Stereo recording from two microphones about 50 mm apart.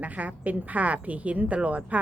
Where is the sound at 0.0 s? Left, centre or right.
Right.